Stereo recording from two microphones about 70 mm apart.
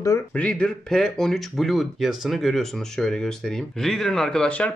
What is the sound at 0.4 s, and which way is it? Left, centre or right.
Speech, centre.